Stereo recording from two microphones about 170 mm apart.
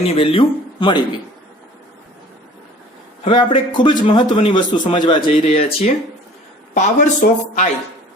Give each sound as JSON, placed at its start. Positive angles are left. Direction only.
{"t": 0.0, "sound": "speech", "side_deg": 35}
{"t": 3.2, "sound": "speech", "side_deg": 30}